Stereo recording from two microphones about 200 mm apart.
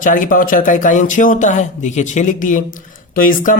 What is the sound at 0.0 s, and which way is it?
Speech, 40° left (ahead or behind).